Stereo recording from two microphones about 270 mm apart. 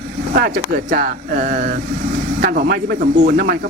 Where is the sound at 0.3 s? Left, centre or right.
Right.